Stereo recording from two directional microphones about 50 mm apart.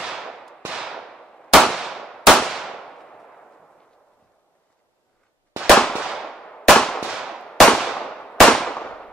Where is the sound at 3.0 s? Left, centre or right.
Centre.